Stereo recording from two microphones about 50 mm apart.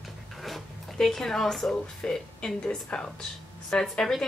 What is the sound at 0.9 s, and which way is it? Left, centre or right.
A woman's voice, centre.